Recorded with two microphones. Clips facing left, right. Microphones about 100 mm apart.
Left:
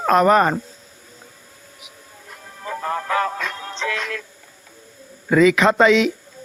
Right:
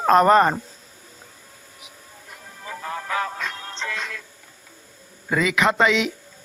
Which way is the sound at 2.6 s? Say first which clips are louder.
Left 6 dB; 60° left (ahead or behind).